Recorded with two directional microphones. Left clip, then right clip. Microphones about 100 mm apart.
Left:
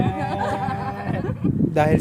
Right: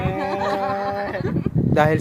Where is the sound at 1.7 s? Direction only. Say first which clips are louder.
Right 2 dB; 40° left (ahead or behind).